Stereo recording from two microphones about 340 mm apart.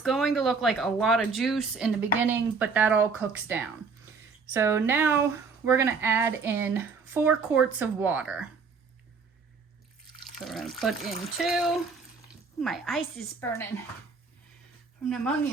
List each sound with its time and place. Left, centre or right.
0.0 s speech: centre
10.3 s speech: centre
15.0 s speech: centre